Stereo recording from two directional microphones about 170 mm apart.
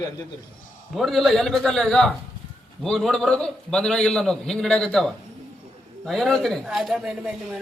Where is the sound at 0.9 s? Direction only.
Centre (ahead or behind).